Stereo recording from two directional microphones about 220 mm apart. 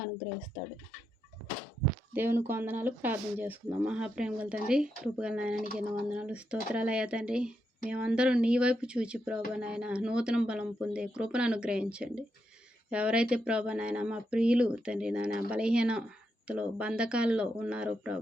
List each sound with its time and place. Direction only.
2.1 s speech: 10° right (ahead or behind)